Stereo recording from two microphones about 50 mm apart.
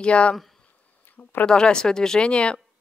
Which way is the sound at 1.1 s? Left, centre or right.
Left.